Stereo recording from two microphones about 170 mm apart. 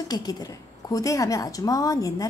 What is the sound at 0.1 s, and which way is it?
A woman's voice, 25° left (ahead or behind).